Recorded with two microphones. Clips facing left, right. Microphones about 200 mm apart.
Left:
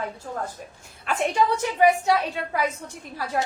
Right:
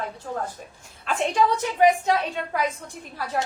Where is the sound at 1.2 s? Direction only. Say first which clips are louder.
Even; 10° left (ahead or behind).